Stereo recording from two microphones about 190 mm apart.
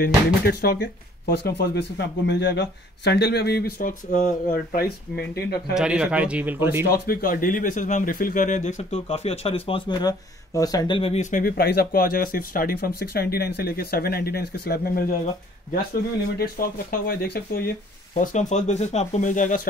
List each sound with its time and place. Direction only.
0.0 s speech: 55° left (ahead or behind)
5.8 s a man's voice: 5° right (ahead or behind)
6.9 s speech: 50° left (ahead or behind)
16.3 s speech: 50° left (ahead or behind)